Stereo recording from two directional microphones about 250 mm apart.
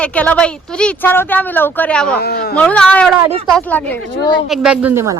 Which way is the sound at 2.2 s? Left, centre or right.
Left.